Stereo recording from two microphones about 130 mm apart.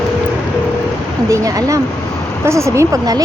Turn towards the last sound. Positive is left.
turn(degrees=-25)  # may be behind; listen again after turning